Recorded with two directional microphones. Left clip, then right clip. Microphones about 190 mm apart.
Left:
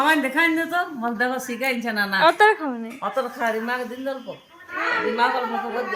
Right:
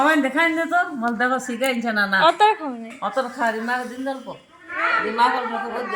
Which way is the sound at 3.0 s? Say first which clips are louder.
Right 2 dB; 15° left (ahead or behind).